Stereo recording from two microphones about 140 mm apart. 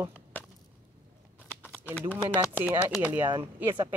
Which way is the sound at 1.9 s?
15° left (ahead or behind).